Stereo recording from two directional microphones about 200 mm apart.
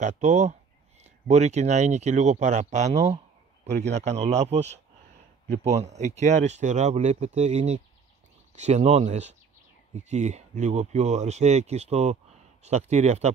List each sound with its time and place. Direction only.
0.0 s speech: 35° right (ahead or behind)